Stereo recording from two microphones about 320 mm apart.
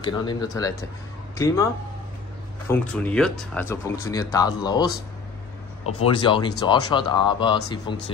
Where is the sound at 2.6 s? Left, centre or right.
Centre.